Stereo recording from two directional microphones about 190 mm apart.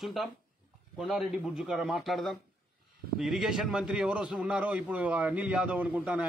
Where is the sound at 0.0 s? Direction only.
Centre (ahead or behind).